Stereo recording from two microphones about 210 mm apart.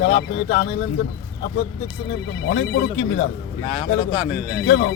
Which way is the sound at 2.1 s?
55° left (ahead or behind).